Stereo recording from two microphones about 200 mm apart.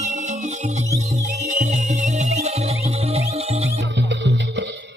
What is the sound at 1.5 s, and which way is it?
Music, 40° right (ahead or behind).